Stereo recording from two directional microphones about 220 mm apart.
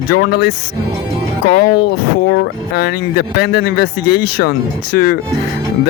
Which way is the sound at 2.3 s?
45° left (ahead or behind).